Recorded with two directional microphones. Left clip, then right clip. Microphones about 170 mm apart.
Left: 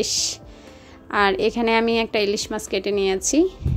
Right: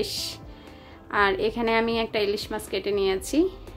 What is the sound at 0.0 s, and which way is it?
A woman's voice, 40° left (ahead or behind).